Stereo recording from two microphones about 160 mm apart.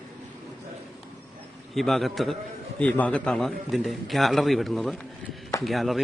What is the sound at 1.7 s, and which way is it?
A man's voice, centre (ahead or behind).